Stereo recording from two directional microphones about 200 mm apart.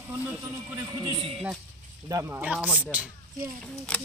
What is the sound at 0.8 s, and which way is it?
Speech, 20° right (ahead or behind).